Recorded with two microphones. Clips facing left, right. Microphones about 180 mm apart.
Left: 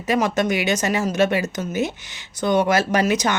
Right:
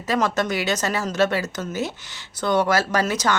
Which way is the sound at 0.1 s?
15° left (ahead or behind).